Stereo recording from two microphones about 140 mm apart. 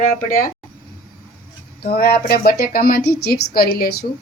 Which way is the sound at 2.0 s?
90° left.